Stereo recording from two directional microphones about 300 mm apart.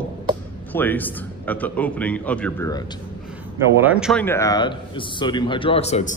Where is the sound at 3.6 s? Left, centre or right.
Centre.